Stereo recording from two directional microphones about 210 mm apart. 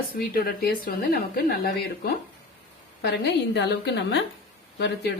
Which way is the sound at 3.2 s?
55° left (ahead or behind).